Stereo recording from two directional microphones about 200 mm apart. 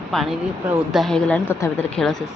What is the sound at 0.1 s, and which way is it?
A woman's voice, centre (ahead or behind).